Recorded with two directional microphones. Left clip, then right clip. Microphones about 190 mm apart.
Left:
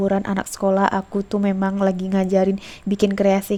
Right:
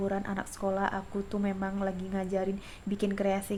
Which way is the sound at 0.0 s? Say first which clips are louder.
Left 11 dB; 45° left (ahead or behind).